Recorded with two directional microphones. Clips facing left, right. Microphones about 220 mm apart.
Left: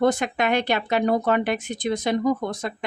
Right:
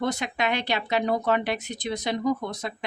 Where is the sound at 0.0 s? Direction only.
50° left (ahead or behind).